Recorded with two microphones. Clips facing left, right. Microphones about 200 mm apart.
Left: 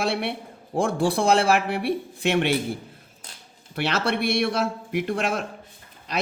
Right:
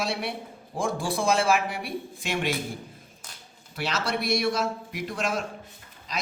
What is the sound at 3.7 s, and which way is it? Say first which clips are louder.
A man's voice: left 5 dB; 60° left (ahead or behind).